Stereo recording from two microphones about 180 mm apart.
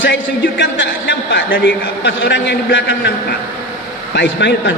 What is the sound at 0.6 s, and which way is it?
A man's voice, 70° left (ahead or behind).